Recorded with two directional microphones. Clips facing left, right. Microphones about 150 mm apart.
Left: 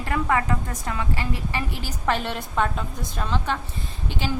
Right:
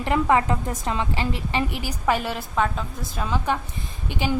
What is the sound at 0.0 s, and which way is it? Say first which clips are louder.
A woman's voice: right 4 dB; 20° right (ahead or behind).